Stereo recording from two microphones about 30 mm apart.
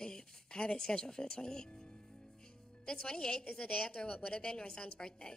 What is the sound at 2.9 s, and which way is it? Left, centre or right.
A woman's voice, left.